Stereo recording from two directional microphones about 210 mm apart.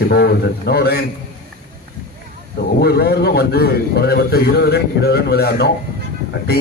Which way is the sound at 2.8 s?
50° left (ahead or behind).